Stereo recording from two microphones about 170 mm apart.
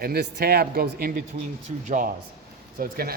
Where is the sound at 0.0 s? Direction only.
70° right (ahead or behind).